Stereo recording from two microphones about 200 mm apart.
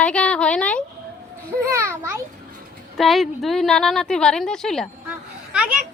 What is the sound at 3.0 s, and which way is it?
A woman's voice, centre (ahead or behind).